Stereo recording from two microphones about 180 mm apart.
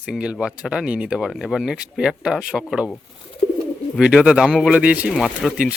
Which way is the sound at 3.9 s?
5° right (ahead or behind).